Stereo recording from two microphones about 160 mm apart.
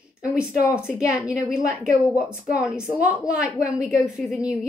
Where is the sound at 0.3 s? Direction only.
5° right (ahead or behind).